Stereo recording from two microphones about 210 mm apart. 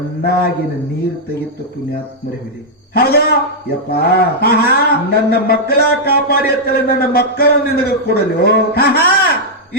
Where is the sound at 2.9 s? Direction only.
50° left (ahead or behind).